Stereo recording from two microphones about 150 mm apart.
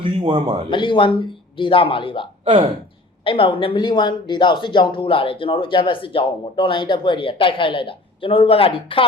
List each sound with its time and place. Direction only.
0.0 s a man's voice: 35° right (ahead or behind)
0.7 s speech: 35° left (ahead or behind)
3.2 s speech: 35° left (ahead or behind)